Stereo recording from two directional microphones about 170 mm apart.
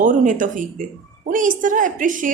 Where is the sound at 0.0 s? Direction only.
50° right (ahead or behind).